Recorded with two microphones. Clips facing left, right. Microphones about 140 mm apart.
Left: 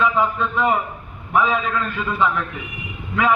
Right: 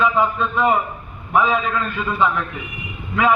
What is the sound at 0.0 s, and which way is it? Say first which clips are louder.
A man's voice: right 1 dB; 10° right (ahead or behind).